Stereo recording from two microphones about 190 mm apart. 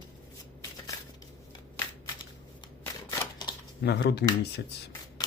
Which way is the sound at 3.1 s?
25° left (ahead or behind).